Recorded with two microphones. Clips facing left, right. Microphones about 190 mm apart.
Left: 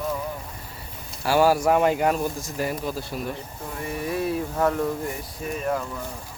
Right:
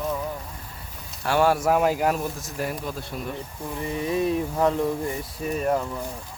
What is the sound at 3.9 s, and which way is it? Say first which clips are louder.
Speech: right 2 dB; 20° right (ahead or behind).